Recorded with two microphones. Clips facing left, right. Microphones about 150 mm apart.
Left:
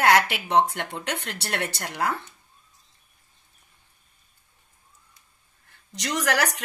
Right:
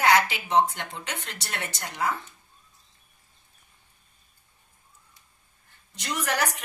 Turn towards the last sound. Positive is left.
turn(degrees=80)